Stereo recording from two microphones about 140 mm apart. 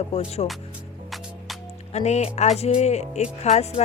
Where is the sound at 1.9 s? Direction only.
50° left (ahead or behind).